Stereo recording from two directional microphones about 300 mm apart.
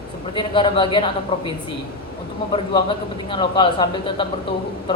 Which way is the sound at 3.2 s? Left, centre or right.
Centre.